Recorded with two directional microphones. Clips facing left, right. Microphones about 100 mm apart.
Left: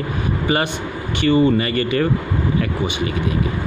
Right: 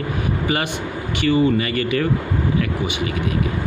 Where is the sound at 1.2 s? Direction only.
35° left (ahead or behind).